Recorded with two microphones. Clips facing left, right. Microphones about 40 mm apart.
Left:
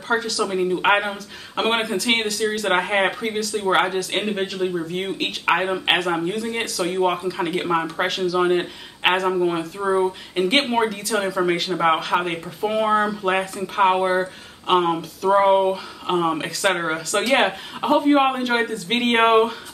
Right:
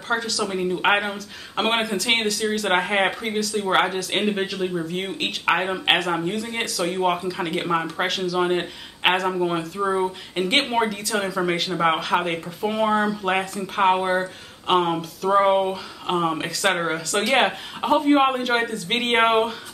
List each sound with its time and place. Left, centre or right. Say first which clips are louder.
0.1 s speech: left 2 dB; centre